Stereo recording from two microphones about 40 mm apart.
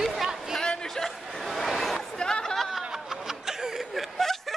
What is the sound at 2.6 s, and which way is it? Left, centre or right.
Snicker, centre.